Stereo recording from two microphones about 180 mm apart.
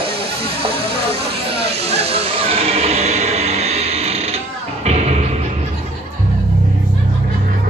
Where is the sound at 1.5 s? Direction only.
35° right (ahead or behind).